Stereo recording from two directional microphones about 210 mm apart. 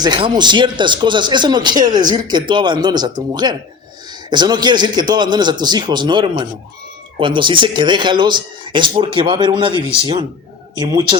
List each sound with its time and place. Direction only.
0.0 s speech: 20° right (ahead or behind)